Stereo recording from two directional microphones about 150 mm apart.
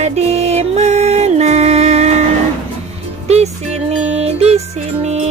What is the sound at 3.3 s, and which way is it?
Music, 45° right (ahead or behind).